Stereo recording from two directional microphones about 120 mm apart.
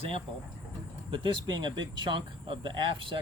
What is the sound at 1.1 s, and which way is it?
Speech, 40° right (ahead or behind).